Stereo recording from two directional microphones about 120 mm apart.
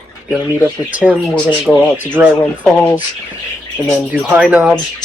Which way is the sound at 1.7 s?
Centre (ahead or behind).